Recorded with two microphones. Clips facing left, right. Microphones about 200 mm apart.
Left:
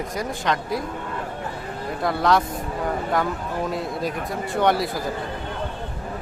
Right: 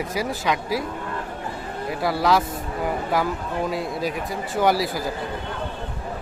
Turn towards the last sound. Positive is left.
turn(degrees=0)  # may be behind; listen again after turning